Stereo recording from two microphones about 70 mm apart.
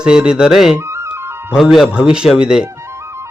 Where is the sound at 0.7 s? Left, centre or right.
Right.